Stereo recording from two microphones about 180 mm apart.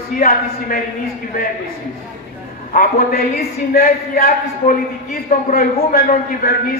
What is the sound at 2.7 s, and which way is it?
A man's voice, 50° left (ahead or behind).